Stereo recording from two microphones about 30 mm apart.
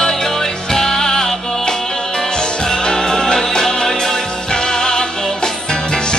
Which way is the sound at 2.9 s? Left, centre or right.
Left.